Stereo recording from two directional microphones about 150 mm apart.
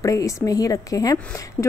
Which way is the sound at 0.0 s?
20° left (ahead or behind).